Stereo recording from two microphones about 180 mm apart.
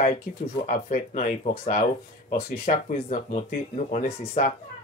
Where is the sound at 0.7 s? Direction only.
45° left (ahead or behind).